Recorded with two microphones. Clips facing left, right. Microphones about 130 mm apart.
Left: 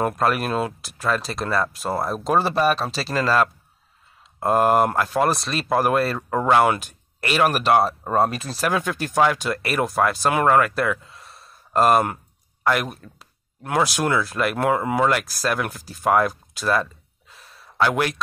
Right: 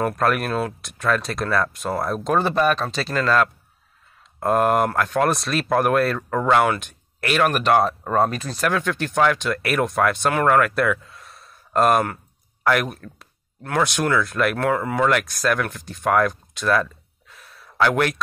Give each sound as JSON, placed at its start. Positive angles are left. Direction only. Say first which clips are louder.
{"t": 0.1, "sound": "speech", "louder": "even", "side_deg": 0}
{"t": 14.7, "sound": "speech", "louder": "left 3 dB", "side_deg": 15}
{"t": 15.1, "sound": "speech", "louder": "right 2 dB", "side_deg": 5}
{"t": 17.3, "sound": "a sound", "louder": "right 1 dB", "side_deg": 0}